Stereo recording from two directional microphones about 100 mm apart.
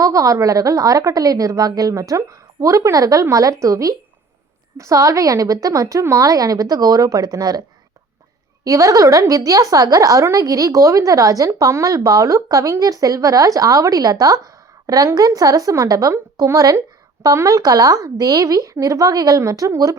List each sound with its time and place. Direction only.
0.0 s a woman's voice: 35° right (ahead or behind)
8.6 s a woman's voice: 35° right (ahead or behind)